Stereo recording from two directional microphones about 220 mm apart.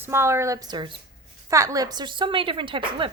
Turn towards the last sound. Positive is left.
turn(degrees=-20)  # may be behind; listen again after turning